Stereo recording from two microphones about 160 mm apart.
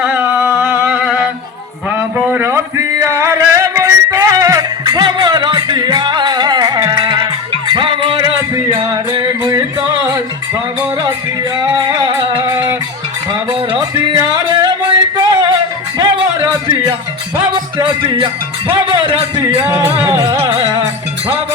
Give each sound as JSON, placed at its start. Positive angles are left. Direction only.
{"t": 0.0, "sound": "singing", "side_deg": -15}
{"t": 1.9, "sound": "a sound", "side_deg": -10}
{"t": 7.7, "sound": "music", "side_deg": -30}
{"t": 11.5, "sound": "music", "side_deg": -25}
{"t": 18.7, "sound": "a man's voice", "side_deg": -30}
{"t": 19.6, "sound": "music", "side_deg": -20}
{"t": 20.3, "sound": "music", "side_deg": -35}